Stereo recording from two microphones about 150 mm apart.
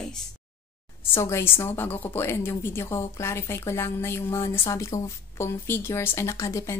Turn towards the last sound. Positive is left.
turn(degrees=20)  # may be behind; listen again after turning